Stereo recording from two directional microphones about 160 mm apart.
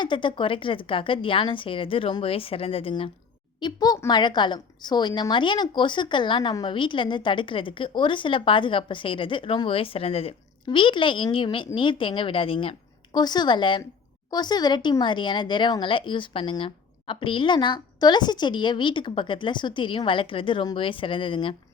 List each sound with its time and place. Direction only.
0.0 s a woman's voice: 30° left (ahead or behind)
3.6 s a woman's voice: 25° left (ahead or behind)